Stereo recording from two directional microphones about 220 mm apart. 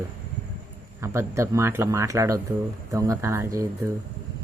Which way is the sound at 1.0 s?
10° right (ahead or behind).